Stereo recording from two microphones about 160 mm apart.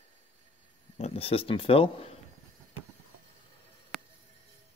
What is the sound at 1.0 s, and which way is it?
Speech, 35° left (ahead or behind).